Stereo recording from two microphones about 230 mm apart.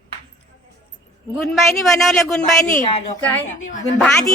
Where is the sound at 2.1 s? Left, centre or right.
Centre.